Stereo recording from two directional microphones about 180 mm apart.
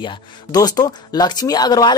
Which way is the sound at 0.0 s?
25° left (ahead or behind).